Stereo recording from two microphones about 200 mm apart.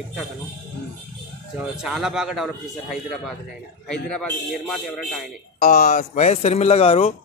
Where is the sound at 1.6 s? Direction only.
5° right (ahead or behind).